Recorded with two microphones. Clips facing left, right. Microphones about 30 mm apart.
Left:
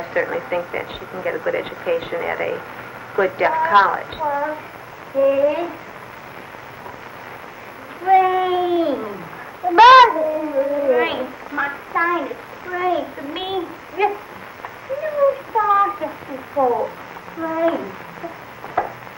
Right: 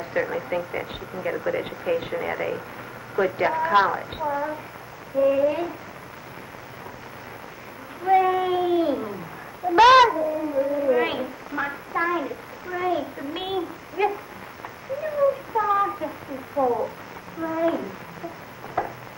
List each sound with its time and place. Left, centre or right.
0.0 s a child's voice: centre
8.0 s a child's voice: centre
15.1 s a child's voice: centre
18.8 s a sound: centre